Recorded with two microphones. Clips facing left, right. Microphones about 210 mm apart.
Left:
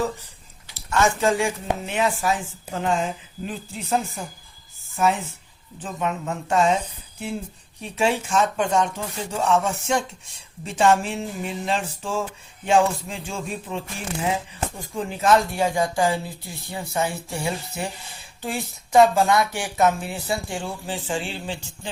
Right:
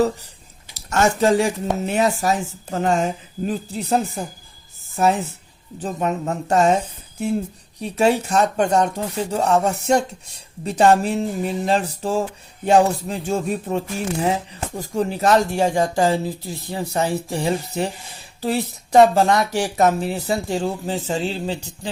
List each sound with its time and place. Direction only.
0.9 s speech: 40° right (ahead or behind)